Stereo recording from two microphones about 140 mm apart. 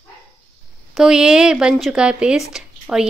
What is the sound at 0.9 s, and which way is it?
Speech, 5° right (ahead or behind).